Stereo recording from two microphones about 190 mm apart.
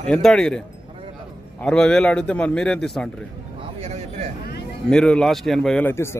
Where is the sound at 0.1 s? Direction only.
5° left (ahead or behind).